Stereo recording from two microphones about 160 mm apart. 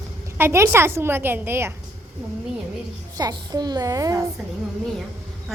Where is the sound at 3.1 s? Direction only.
25° right (ahead or behind).